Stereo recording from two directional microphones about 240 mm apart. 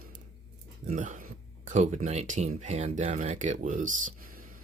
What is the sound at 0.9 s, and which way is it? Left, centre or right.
Speech, right.